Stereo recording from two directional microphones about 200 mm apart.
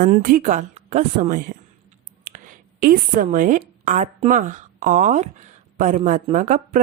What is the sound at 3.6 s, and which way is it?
Speech, 35° right (ahead or behind).